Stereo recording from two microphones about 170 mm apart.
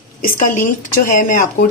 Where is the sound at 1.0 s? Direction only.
50° left (ahead or behind).